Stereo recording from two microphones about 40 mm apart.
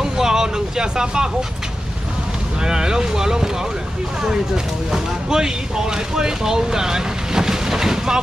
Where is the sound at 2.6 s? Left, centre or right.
Centre.